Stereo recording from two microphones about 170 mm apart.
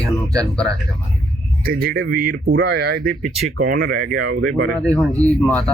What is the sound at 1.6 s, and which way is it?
Speech, 60° right (ahead or behind).